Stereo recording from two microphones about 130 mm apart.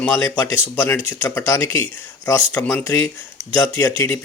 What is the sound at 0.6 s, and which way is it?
Speech, 10° left (ahead or behind).